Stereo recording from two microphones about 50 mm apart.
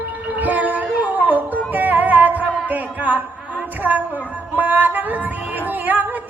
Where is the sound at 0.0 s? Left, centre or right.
Right.